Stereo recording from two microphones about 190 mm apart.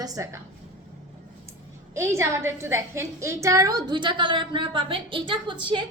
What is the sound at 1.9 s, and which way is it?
A woman's voice, 15° right (ahead or behind).